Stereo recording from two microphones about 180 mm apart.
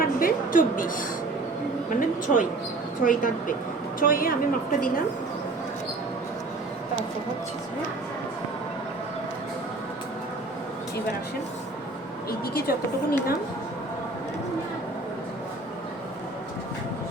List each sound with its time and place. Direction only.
0.0 s a sound: 50° left (ahead or behind)
3.0 s speech: 50° left (ahead or behind)
12.5 s a woman's voice: 55° left (ahead or behind)